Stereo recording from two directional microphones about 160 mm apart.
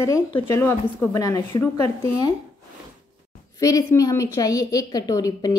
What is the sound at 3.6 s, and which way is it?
A woman's voice, 20° left (ahead or behind).